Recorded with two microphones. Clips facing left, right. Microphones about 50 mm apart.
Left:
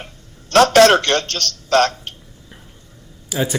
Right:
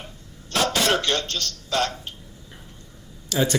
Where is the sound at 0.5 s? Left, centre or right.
Left.